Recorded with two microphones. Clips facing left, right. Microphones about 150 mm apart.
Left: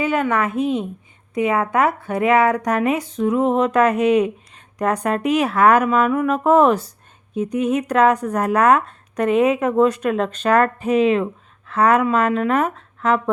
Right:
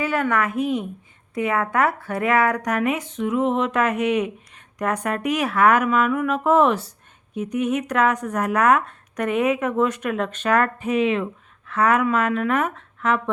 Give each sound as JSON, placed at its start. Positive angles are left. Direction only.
{"t": 0.0, "sound": "a woman's voice", "side_deg": 20}